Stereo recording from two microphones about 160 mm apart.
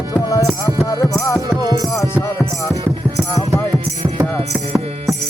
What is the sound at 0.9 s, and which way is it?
Music, 20° left (ahead or behind).